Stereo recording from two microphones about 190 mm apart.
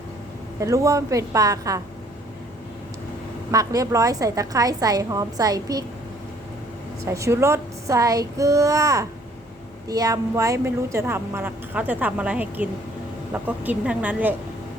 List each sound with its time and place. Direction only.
0.6 s a woman's voice: 15° right (ahead or behind)
3.5 s a woman's voice: 20° right (ahead or behind)
7.0 s a woman's voice: 15° right (ahead or behind)